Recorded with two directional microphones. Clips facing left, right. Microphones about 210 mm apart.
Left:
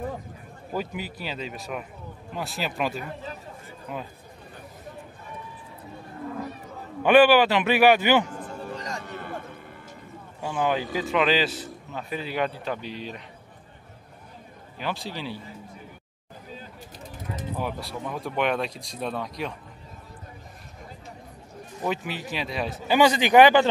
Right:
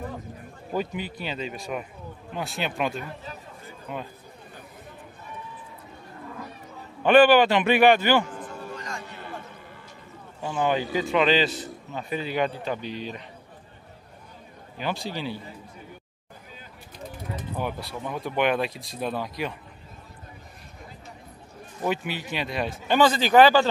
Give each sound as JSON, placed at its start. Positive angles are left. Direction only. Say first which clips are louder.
{"t": 0.7, "sound": "a man's voice", "louder": "right 2 dB", "side_deg": 5}
{"t": 7.0, "sound": "a man's voice", "louder": "even", "side_deg": 10}
{"t": 8.7, "sound": "a sound", "louder": "left 2 dB", "side_deg": 35}
{"t": 10.4, "sound": "a man's voice", "louder": "right 1 dB", "side_deg": 0}
{"t": 14.8, "sound": "a man's voice", "louder": "right 2 dB", "side_deg": 0}
{"t": 17.6, "sound": "a man's voice", "louder": "right 1 dB", "side_deg": 0}
{"t": 21.8, "sound": "a man's voice", "louder": "right 1 dB", "side_deg": 0}